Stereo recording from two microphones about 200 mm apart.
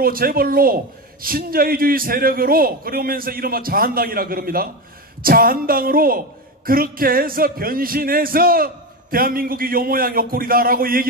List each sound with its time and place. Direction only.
0.0 s a woman's voice: 45° right (ahead or behind)